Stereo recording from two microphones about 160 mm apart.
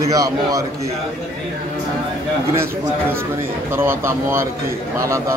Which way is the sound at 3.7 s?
15° right (ahead or behind).